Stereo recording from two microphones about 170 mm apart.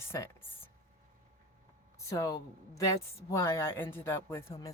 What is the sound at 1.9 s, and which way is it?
Speech, 20° left (ahead or behind).